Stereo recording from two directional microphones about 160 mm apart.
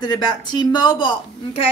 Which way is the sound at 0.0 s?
25° left (ahead or behind).